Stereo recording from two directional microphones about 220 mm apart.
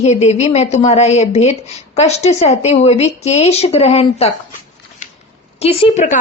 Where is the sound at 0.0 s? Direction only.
30° left (ahead or behind).